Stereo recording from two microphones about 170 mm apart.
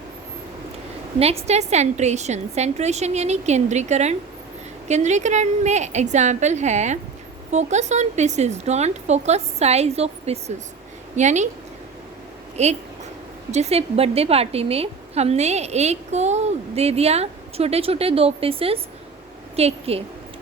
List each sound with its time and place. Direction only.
1.2 s a woman's voice: 35° right (ahead or behind)
12.6 s a woman's voice: 40° right (ahead or behind)